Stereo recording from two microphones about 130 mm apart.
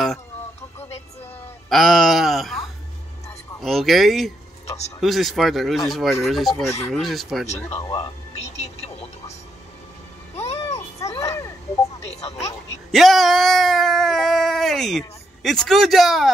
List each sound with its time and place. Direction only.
1.7 s speech: centre (ahead or behind)
7.8 s speech: 30° left (ahead or behind)
10.4 s music: 55° left (ahead or behind)
11.0 s a sound: 25° left (ahead or behind)
12.2 s a sound: 55° left (ahead or behind)
12.9 s speech: centre (ahead or behind)